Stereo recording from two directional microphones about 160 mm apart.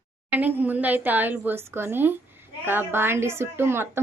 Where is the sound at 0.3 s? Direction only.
10° right (ahead or behind).